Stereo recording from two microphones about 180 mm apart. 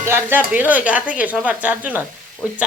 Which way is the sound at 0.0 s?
10° right (ahead or behind).